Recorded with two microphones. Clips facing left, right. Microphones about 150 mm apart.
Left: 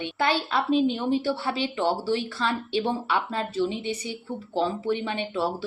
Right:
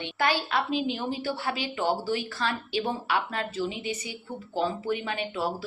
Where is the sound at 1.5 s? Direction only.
30° left (ahead or behind).